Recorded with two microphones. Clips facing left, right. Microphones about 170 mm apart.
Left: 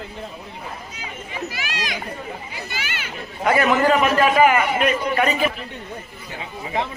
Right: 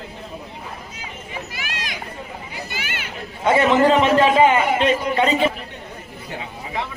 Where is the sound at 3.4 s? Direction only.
25° right (ahead or behind).